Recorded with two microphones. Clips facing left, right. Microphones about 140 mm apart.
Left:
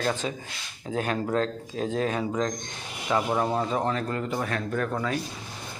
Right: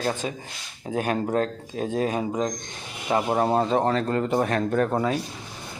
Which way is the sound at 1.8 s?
15° right (ahead or behind).